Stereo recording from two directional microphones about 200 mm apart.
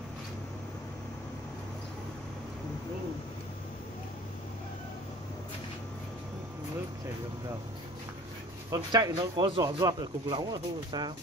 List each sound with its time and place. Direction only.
8.6 s speech: 20° right (ahead or behind)